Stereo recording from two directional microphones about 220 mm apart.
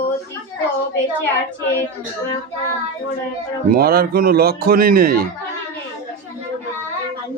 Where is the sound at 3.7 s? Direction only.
45° right (ahead or behind).